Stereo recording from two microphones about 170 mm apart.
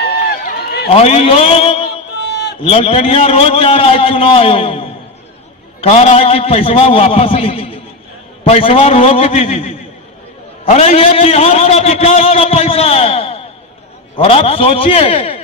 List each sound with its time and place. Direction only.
0.9 s a man's voice: 35° left (ahead or behind)
2.2 s a sound: 80° left
2.6 s a man's voice: 35° left (ahead or behind)